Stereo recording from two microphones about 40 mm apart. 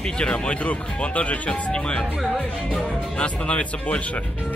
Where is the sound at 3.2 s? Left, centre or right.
Left.